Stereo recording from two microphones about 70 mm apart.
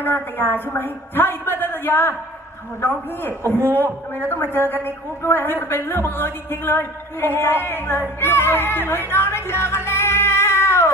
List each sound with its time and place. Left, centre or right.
0.0 s speech: left
3.2 s speech: left